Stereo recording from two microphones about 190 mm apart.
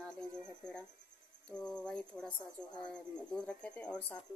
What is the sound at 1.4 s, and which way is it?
Speech, 5° left (ahead or behind).